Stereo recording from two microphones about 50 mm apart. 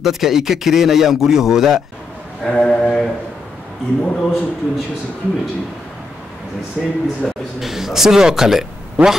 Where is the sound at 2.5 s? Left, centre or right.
Left.